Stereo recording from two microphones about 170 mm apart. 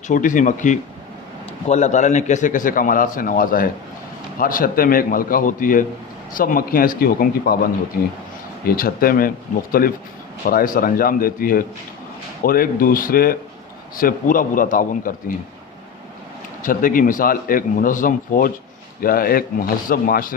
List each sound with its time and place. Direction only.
0.1 s a man's voice: 50° left (ahead or behind)
10.4 s a man's voice: 55° left (ahead or behind)
16.6 s a man's voice: 55° left (ahead or behind)